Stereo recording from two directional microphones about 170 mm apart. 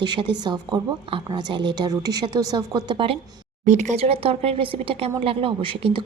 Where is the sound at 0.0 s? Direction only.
25° right (ahead or behind).